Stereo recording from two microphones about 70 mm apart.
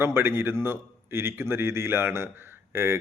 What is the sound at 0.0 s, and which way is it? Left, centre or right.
Speech, right.